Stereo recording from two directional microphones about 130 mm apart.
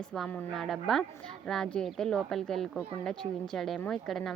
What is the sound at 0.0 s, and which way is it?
A child's voice, 5° left (ahead or behind).